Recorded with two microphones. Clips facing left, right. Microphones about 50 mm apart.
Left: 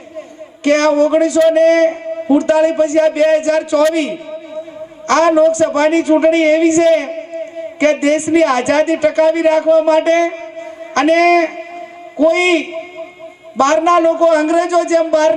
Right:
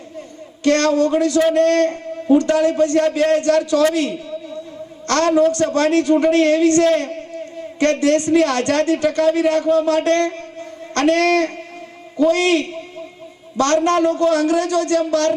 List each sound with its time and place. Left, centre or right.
0.6 s a man's voice: left
3.9 s a sound: left
5.0 s a woman's voice: left